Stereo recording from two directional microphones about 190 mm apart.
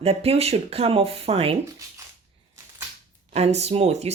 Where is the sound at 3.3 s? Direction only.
35° right (ahead or behind).